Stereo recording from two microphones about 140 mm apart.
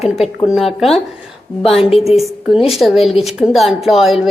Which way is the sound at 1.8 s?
45° left (ahead or behind).